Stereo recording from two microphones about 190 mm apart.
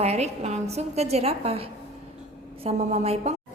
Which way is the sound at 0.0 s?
35° right (ahead or behind).